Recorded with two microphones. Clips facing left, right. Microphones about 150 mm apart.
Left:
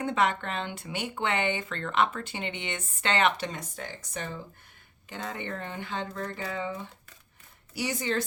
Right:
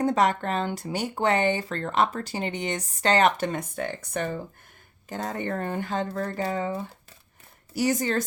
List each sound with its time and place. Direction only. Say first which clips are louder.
0.0 s speech: right 5 dB; 40° right (ahead or behind); by 4.4 s 60° right (ahead or behind)
5.0 s speech: right 6 dB; 45° right (ahead or behind)